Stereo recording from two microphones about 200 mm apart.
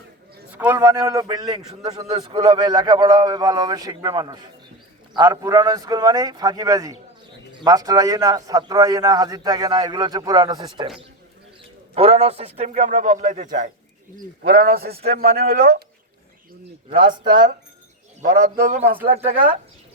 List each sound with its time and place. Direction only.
0.5 s a man's voice: 10° right (ahead or behind)
11.9 s a man's voice: 30° right (ahead or behind); by 15.8 s 55° right (ahead or behind)
16.9 s a man's voice: 25° right (ahead or behind)
18.6 s a man's voice: 35° right (ahead or behind)